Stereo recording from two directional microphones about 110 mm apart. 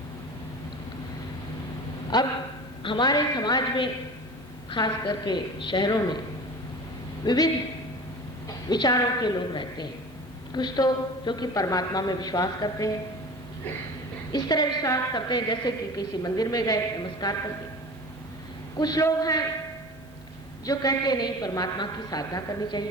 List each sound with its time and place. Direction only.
2.1 s a woman's voice: 40° left (ahead or behind)
7.3 s a woman's voice: 35° left (ahead or behind)
14.3 s a woman's voice: 40° left (ahead or behind)
18.8 s a woman's voice: 35° left (ahead or behind)
20.7 s a woman's voice: 35° left (ahead or behind)